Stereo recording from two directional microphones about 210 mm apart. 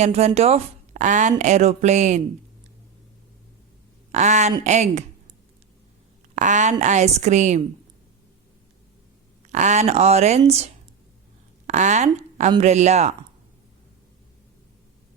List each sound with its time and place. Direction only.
0.0 s speech: 30° right (ahead or behind)
4.1 s speech: 35° right (ahead or behind)
6.3 s speech: 35° right (ahead or behind)
9.5 s speech: 35° right (ahead or behind)